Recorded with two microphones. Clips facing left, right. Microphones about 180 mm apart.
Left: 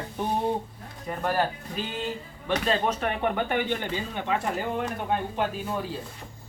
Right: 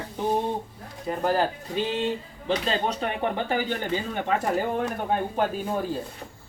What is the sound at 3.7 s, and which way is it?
Speech, 45° right (ahead or behind).